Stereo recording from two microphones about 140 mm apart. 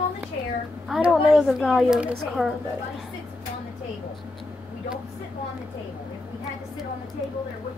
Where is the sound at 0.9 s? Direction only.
5° right (ahead or behind).